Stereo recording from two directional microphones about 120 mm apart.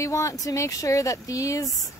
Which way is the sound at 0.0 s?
25° left (ahead or behind).